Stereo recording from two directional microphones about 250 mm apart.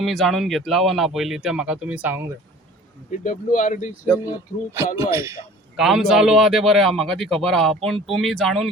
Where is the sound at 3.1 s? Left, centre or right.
Left.